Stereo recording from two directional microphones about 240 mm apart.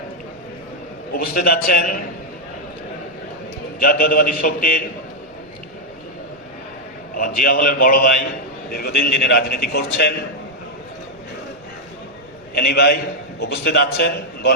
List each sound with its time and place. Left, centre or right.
1.1 s a man's voice: left
3.8 s a man's voice: left
7.2 s a man's voice: left
12.5 s a man's voice: left